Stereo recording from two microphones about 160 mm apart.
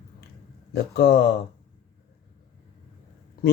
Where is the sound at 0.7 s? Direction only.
85° left.